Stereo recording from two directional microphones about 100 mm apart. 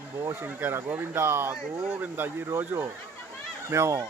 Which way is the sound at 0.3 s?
20° right (ahead or behind).